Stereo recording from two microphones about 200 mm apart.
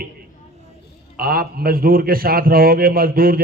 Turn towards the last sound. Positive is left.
turn(degrees=-45)  # may be behind; listen again after turning